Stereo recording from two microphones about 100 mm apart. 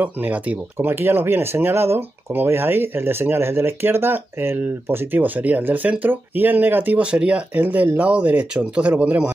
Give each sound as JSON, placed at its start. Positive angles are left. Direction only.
{"t": 0.0, "sound": "speech", "side_deg": -15}